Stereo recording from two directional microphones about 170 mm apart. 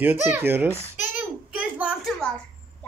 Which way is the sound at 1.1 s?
10° right (ahead or behind).